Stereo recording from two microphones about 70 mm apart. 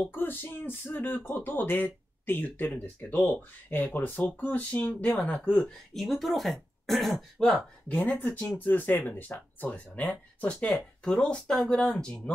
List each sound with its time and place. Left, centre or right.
0.1 s speech: left
5.9 s speech: centre
7.9 s speech: left